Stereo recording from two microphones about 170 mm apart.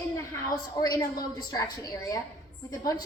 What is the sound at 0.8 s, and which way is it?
A woman's voice, 20° left (ahead or behind).